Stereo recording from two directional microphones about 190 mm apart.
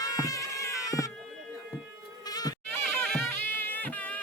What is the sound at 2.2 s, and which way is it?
Goat, 20° left (ahead or behind).